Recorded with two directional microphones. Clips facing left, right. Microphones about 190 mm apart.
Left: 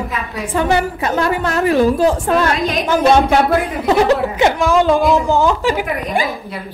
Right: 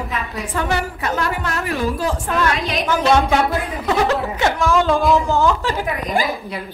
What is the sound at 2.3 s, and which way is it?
Speech, 40° left (ahead or behind).